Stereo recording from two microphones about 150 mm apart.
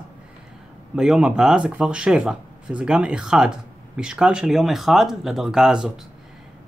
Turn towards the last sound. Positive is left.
turn(degrees=-5)  # may be behind; listen again after turning